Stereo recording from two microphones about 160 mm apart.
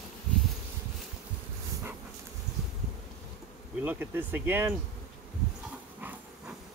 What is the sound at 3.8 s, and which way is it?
Speech, 15° right (ahead or behind).